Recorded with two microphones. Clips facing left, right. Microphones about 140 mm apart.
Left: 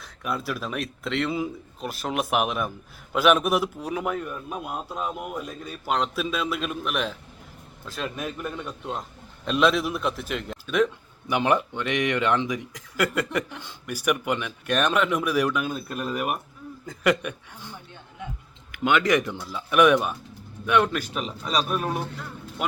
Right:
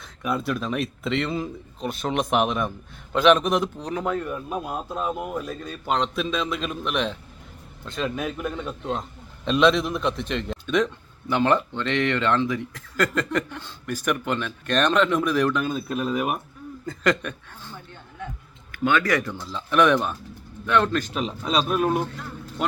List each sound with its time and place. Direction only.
0.0 s a man's voice: centre (ahead or behind)